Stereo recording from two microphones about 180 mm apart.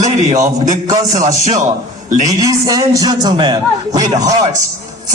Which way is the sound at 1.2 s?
40° right (ahead or behind).